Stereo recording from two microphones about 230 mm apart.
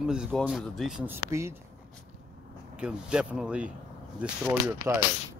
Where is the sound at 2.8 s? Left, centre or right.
Centre.